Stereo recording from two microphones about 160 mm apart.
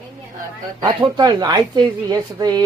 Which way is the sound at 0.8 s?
30° right (ahead or behind).